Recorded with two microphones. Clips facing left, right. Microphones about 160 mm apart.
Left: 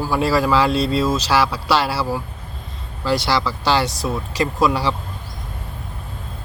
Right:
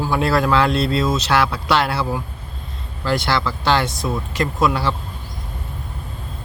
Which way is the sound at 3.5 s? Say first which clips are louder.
Even; 10° left (ahead or behind).